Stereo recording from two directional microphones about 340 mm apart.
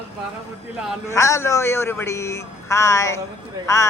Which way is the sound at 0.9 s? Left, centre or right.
Centre.